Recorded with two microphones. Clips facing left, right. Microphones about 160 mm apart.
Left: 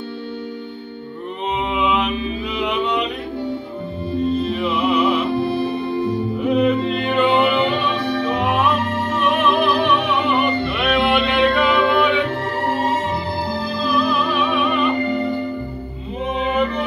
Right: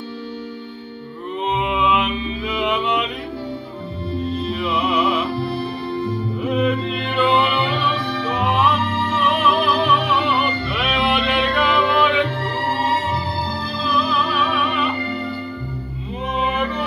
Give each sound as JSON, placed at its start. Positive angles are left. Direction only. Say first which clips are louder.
{"t": 1.7, "sound": "music", "louder": "left 2 dB", "side_deg": 0}
{"t": 4.6, "sound": "music", "louder": "left 2 dB", "side_deg": 0}
{"t": 5.3, "sound": "music", "louder": "left 4 dB", "side_deg": 45}
{"t": 6.4, "sound": "music", "louder": "left 3 dB", "side_deg": 0}
{"t": 13.8, "sound": "music", "louder": "left 1 dB", "side_deg": 0}